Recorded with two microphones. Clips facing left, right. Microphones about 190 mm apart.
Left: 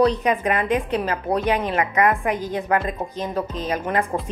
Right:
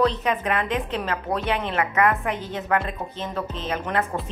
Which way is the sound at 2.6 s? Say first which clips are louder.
Even; 35° left (ahead or behind).